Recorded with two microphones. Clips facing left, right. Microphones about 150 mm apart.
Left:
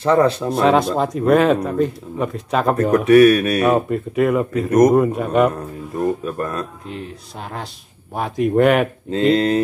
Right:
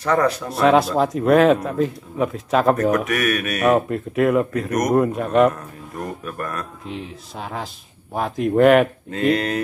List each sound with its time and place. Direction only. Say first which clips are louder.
0.0 s speech: left 4 dB; 25° left (ahead or behind)
0.5 s speech: left 1 dB; centre (ahead or behind)
3.1 s speech: left 11 dB; 30° left (ahead or behind)
3.6 s speech: left 1 dB; centre (ahead or behind)
4.6 s speech: left 8 dB; 30° left (ahead or behind)
4.9 s speech: left 1 dB; centre (ahead or behind)
6.0 s speech: left 8 dB; 25° left (ahead or behind)
8.1 s speech: left 2 dB; centre (ahead or behind)
9.1 s speech: left 5 dB; 25° left (ahead or behind)